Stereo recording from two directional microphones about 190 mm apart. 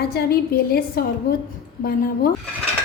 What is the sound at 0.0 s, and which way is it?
A woman's voice, 55° left (ahead or behind).